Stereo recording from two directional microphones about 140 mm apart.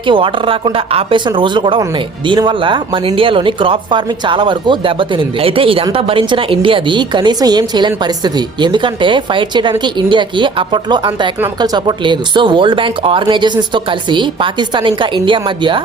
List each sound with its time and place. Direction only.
0.1 s speech: 40° right (ahead or behind)